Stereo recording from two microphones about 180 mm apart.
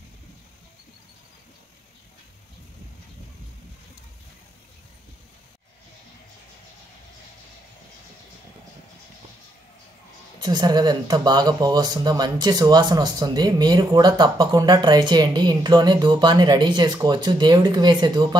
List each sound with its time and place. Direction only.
10.4 s speech: 25° right (ahead or behind)